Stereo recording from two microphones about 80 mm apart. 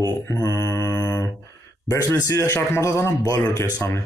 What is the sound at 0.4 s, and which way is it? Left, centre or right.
Mantra, left.